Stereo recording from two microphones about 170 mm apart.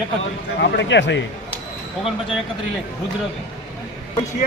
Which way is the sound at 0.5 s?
90° left.